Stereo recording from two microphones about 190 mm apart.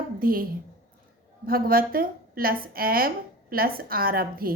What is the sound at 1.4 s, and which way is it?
A woman's voice, 50° right (ahead or behind).